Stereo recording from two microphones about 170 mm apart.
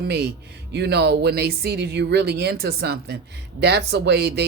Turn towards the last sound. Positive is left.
turn(degrees=-70)  # may be behind; listen again after turning